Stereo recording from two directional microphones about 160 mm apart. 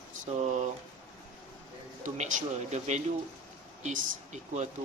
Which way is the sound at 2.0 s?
50° right (ahead or behind).